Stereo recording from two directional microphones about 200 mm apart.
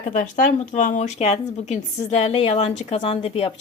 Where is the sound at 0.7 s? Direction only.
40° left (ahead or behind).